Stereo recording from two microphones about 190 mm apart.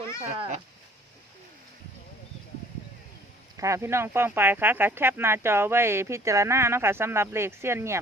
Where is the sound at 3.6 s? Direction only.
15° right (ahead or behind).